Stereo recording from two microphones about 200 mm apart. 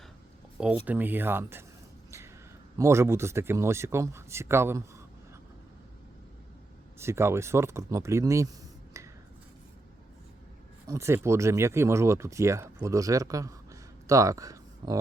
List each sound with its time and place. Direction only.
0.9 s speech: 10° right (ahead or behind)
2.0 s a sound: 15° right (ahead or behind)
2.7 s speech: 15° right (ahead or behind)
7.0 s speech: 10° right (ahead or behind)
10.8 s speech: 15° right (ahead or behind)